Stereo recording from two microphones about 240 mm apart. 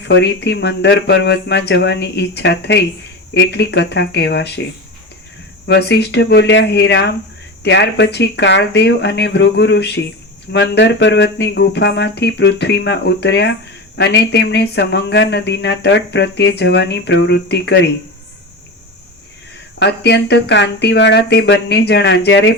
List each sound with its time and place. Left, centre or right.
0.0 s speech: left
5.6 s speech: left
19.8 s speech: left